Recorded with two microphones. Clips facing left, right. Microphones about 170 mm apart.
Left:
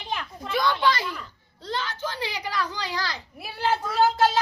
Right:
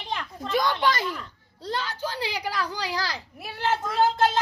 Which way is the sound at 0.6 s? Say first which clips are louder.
Left 3 dB; 45° right (ahead or behind).